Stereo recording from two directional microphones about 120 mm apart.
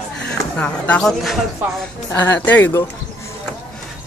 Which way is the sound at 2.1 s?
15° left (ahead or behind).